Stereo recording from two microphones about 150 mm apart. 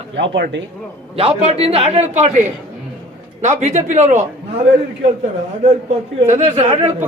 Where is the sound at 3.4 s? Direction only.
50° right (ahead or behind).